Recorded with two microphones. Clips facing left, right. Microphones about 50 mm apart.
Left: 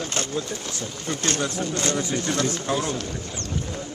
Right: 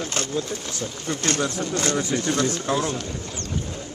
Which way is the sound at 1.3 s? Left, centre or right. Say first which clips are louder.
Right 1 dB; right.